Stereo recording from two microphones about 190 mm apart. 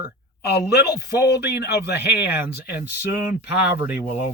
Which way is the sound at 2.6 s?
10° right (ahead or behind).